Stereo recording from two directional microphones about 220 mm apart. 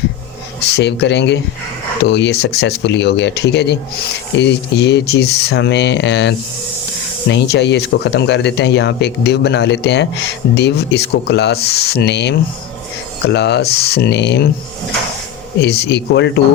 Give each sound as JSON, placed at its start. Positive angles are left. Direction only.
{"t": 0.7, "sound": "speech", "side_deg": 50}
{"t": 15.6, "sound": "speech", "side_deg": 45}